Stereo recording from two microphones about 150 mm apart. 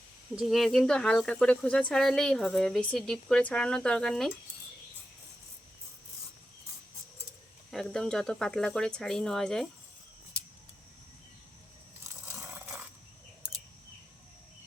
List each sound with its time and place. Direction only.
0.3 s speech: centre (ahead or behind)
7.7 s speech: 5° left (ahead or behind)
12.3 s a sound: 15° right (ahead or behind)